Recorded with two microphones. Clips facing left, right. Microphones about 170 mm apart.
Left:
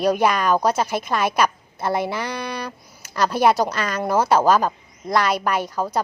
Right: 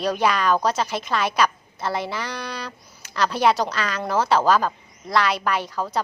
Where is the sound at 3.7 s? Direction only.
45° left (ahead or behind).